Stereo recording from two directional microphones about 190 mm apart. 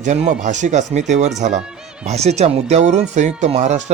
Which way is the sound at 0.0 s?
40° right (ahead or behind).